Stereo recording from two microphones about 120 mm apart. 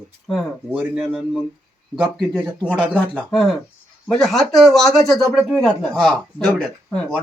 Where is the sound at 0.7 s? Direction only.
10° right (ahead or behind).